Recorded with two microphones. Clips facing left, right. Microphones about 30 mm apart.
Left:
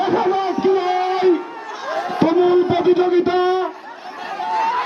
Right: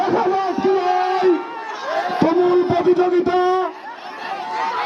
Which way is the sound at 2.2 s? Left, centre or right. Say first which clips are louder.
Left 1 dB; left.